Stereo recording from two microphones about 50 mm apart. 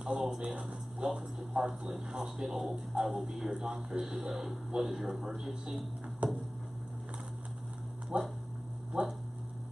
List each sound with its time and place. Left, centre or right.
0.0 s speech: centre
6.2 s a sound: right
8.1 s speech: right